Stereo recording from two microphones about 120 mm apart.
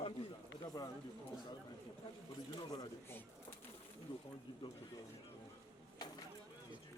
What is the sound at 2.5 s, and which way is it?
Speech, 35° left (ahead or behind).